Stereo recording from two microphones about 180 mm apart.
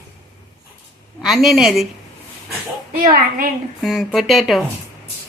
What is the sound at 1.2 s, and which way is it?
Speech, centre (ahead or behind).